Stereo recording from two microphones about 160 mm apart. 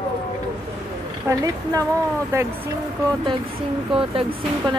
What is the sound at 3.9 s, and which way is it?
Speech, 35° right (ahead or behind).